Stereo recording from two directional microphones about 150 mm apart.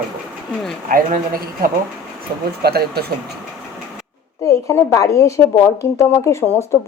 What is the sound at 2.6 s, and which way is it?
Speech, 90° right.